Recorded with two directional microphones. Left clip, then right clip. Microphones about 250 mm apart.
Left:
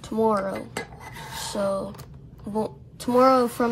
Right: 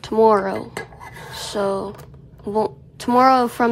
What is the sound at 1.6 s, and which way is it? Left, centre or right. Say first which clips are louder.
Speech: right 4 dB; left.